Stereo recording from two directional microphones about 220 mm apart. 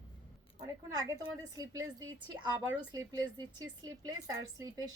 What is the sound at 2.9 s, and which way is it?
A woman's voice, 20° right (ahead or behind).